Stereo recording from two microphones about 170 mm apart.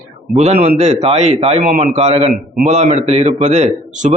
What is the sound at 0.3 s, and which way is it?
A man's voice, 40° right (ahead or behind).